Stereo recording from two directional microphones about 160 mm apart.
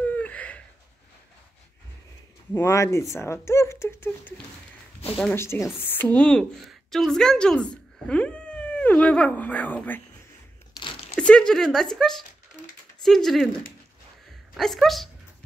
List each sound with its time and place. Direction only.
0.0 s a sound: 10° left (ahead or behind)
2.5 s speech: 20° left (ahead or behind)
5.3 s speech: 15° left (ahead or behind)
10.8 s crunch: 40° left (ahead or behind)
11.1 s speech: 5° left (ahead or behind)
14.6 s speech: centre (ahead or behind)